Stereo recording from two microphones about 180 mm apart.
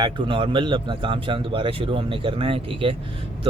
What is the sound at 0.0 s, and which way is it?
Speech, 25° right (ahead or behind).